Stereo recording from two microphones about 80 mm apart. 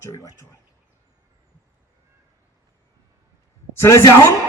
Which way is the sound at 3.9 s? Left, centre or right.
Left.